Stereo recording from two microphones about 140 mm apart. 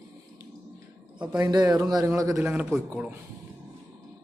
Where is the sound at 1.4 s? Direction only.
30° right (ahead or behind).